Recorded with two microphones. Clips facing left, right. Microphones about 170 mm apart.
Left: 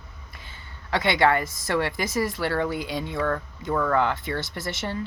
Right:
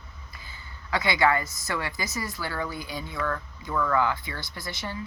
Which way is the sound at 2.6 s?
75° left (ahead or behind).